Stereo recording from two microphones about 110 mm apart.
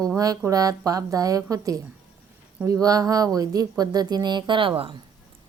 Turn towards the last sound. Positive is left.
turn(degrees=-45)  # may be behind; listen again after turning